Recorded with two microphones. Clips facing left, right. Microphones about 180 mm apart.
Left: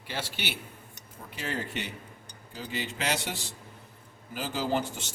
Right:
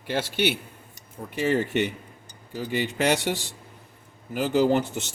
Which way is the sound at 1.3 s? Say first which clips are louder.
Right 11 dB; 65° right (ahead or behind).